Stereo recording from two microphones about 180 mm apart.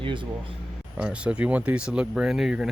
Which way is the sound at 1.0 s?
5° right (ahead or behind).